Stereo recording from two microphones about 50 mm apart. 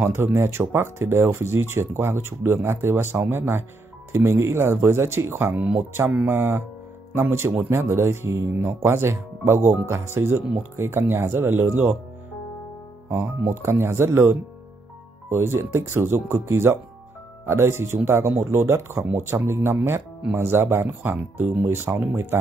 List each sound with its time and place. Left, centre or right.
0.0 s speech: right
4.1 s speech: right
7.2 s speech: right
13.6 s speech: right
20.7 s speech: right